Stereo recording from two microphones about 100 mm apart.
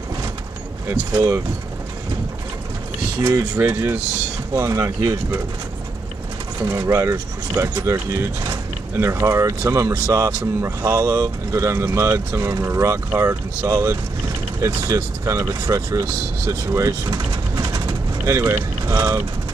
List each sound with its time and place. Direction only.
0.8 s speech: 25° right (ahead or behind)
3.3 s speech: 20° right (ahead or behind)
4.6 s speech: 30° right (ahead or behind)
6.6 s speech: 30° right (ahead or behind)